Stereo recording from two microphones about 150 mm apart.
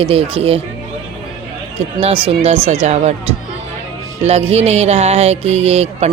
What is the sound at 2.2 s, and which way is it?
Speech, 40° right (ahead or behind).